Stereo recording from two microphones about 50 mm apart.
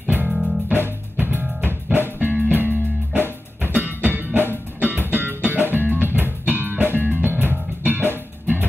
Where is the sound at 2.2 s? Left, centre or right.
Right.